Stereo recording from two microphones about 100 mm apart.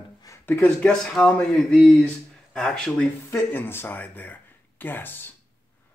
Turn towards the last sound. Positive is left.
turn(degrees=20)  # may be behind; listen again after turning